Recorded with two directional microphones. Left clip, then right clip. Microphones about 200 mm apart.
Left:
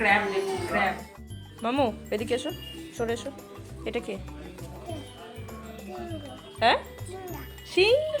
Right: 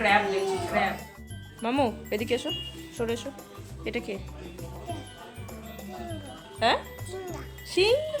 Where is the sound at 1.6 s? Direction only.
10° right (ahead or behind).